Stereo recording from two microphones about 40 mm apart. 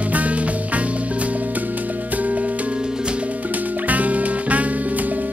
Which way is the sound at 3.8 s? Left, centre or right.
Right.